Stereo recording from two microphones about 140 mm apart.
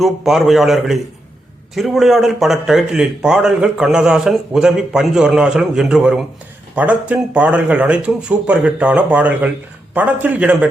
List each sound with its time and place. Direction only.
0.0 s speech: centre (ahead or behind)